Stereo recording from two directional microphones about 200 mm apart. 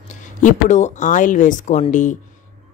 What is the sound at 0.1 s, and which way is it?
A woman's voice, 40° left (ahead or behind).